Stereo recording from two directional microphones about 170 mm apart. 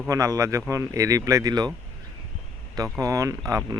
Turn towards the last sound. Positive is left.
turn(degrees=-15)  # may be behind; listen again after turning